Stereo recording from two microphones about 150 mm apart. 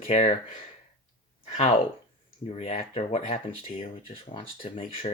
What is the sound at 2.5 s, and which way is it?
Speech, 40° left (ahead or behind).